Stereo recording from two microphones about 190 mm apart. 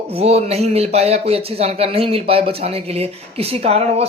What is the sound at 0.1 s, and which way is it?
Speech, 35° right (ahead or behind).